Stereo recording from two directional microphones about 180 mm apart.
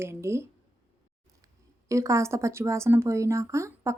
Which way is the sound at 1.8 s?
15° right (ahead or behind).